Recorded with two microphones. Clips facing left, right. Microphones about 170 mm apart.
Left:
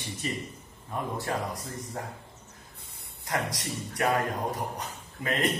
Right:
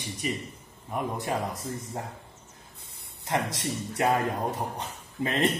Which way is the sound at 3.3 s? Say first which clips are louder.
Right 3 dB; 25° right (ahead or behind).